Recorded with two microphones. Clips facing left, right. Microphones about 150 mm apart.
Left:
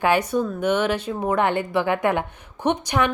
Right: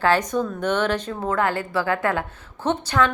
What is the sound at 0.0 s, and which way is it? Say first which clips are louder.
A woman's voice: even; 10° left (ahead or behind).